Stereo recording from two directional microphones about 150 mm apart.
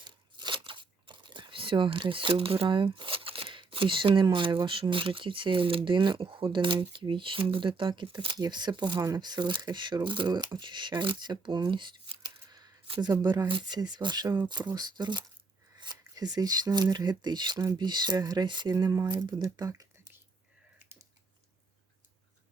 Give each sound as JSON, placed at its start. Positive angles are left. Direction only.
{"t": 0.0, "sound": "crumpling", "side_deg": -30}
{"t": 4.6, "sound": "speech", "side_deg": -35}
{"t": 20.7, "sound": "typing", "side_deg": -15}